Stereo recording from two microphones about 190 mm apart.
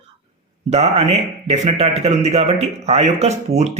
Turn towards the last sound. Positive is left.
turn(degrees=-35)  # may be behind; listen again after turning